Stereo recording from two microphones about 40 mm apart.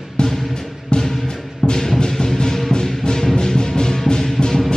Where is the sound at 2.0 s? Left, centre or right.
Centre.